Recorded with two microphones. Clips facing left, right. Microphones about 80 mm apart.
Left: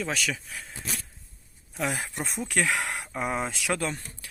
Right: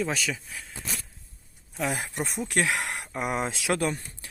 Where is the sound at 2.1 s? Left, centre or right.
Centre.